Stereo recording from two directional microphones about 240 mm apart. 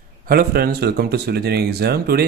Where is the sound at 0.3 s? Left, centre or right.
Right.